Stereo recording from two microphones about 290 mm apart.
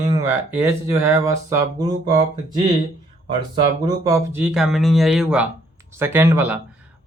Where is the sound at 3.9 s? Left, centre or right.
Centre.